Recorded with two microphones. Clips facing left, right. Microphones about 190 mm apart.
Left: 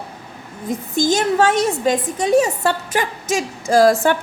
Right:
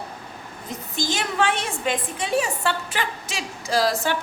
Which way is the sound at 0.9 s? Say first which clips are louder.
Left 8 dB; 45° left (ahead or behind).